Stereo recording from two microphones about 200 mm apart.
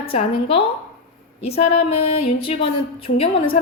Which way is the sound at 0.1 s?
30° left (ahead or behind).